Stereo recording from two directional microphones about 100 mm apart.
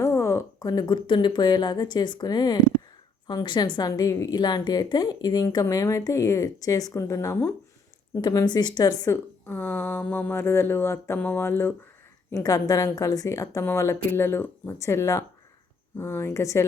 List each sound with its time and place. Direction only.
0.0 s a sound: 30° left (ahead or behind)
1.0 s speech: 55° left (ahead or behind); by 4.4 s 35° left (ahead or behind)
4.4 s speech: 45° left (ahead or behind)
9.0 s speech: 20° left (ahead or behind)
12.3 s speech: 35° left (ahead or behind)